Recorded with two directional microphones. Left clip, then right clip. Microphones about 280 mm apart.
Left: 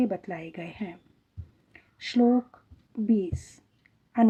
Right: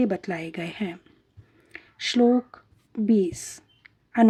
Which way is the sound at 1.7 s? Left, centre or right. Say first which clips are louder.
Right 5 dB; right.